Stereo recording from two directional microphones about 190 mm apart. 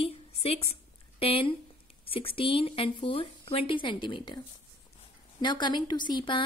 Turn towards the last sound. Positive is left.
turn(degrees=25)  # may be behind; listen again after turning